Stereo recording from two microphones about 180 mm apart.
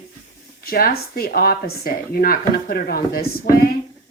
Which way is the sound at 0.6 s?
55° left (ahead or behind).